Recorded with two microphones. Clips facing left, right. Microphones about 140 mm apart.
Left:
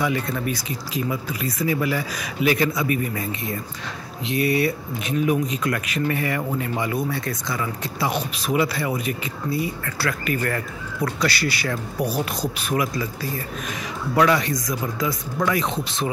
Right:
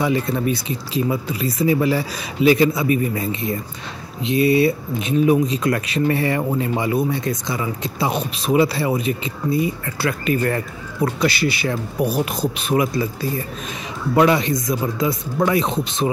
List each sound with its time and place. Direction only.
0.0 s speech: 25° right (ahead or behind)
14.1 s speech: 25° right (ahead or behind)